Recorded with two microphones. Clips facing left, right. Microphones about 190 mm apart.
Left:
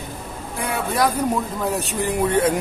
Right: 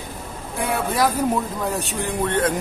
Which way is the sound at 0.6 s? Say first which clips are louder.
Even; centre (ahead or behind).